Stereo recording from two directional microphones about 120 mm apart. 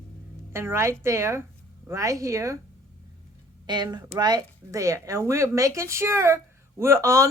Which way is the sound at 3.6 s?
35° right (ahead or behind).